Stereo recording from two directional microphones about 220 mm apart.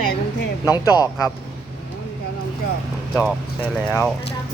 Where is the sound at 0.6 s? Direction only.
15° left (ahead or behind).